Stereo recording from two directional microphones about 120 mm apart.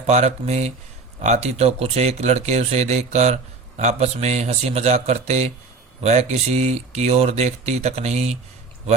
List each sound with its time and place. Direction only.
0.1 s speech: 70° right (ahead or behind)